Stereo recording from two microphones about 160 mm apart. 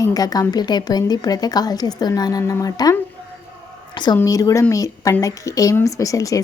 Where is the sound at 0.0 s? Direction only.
25° left (ahead or behind).